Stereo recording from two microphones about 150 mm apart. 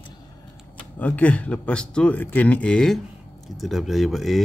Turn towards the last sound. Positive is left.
turn(degrees=0)  # may be behind; listen again after turning